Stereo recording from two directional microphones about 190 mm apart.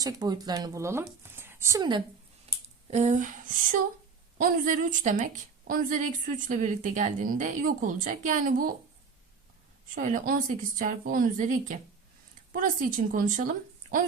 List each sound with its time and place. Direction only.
0.0 s speech: 20° right (ahead or behind)
2.5 s a sound: 30° right (ahead or behind)
4.4 s a woman's voice: 45° right (ahead or behind)
9.9 s a woman's voice: 45° right (ahead or behind)